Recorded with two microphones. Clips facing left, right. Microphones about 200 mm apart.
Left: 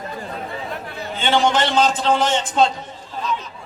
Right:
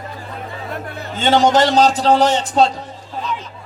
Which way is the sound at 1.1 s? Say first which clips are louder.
Right 5 dB; 40° right (ahead or behind).